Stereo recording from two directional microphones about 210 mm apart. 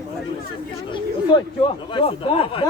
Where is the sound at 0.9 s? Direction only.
20° left (ahead or behind).